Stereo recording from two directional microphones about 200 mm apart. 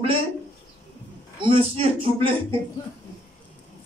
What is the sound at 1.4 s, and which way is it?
Speech, 25° right (ahead or behind).